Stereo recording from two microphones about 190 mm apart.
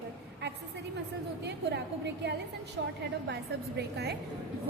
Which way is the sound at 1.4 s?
65° right (ahead or behind).